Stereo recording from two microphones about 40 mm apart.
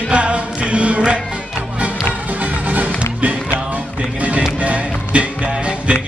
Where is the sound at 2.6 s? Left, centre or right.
Right.